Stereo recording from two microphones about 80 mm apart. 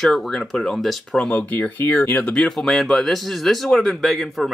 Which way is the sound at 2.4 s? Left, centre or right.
Centre.